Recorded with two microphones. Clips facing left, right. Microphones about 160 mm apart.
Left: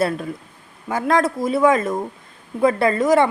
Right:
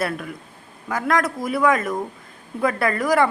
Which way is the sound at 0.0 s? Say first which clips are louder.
Left 5 dB; 30° left (ahead or behind).